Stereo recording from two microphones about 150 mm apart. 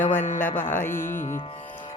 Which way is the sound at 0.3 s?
15° left (ahead or behind).